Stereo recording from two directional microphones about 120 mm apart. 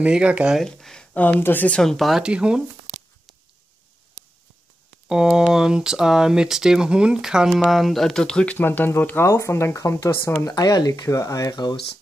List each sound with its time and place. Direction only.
0.0 s speech: 10° right (ahead or behind)
0.6 s speech: 5° left (ahead or behind)
1.8 s speech: centre (ahead or behind)
5.0 s speech: 5° right (ahead or behind)
8.5 s speech: 15° left (ahead or behind); by 11.7 s 30° left (ahead or behind)